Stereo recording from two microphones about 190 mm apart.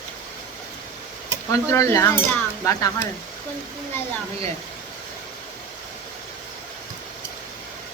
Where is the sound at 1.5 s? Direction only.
15° left (ahead or behind).